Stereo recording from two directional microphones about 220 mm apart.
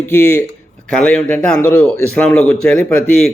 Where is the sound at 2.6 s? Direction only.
5° left (ahead or behind).